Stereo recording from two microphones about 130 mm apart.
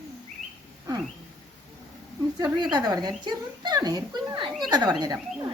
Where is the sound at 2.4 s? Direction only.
35° right (ahead or behind).